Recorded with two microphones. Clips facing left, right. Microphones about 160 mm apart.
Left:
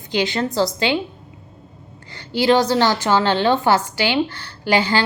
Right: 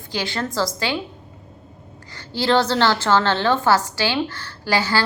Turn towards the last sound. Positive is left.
turn(degrees=20)  # may be behind; listen again after turning